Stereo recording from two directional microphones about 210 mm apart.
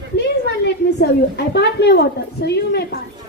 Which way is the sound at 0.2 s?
55° left (ahead or behind).